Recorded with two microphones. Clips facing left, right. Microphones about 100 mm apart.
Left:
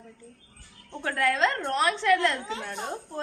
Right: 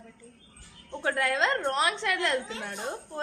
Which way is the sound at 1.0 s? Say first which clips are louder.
Left 2 dB; 20° right (ahead or behind).